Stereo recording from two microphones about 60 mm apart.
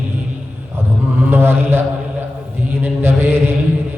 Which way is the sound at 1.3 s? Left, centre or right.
Right.